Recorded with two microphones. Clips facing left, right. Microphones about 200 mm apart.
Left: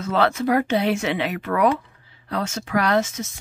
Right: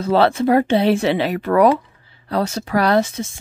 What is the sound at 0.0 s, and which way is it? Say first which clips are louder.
Speech: right 5 dB; 30° right (ahead or behind).